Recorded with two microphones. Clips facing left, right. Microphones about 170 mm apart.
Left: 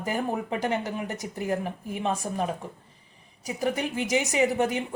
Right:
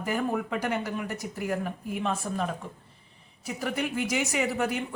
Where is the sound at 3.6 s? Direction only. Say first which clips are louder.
Left 2 dB; 20° left (ahead or behind).